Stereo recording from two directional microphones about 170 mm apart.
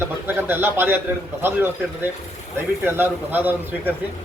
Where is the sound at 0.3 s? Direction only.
10° right (ahead or behind).